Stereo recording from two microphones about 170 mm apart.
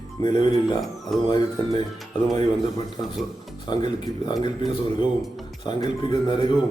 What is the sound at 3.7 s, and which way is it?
Speech, 25° left (ahead or behind).